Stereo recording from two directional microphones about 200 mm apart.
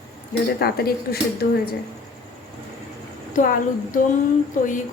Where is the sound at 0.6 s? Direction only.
50° left (ahead or behind).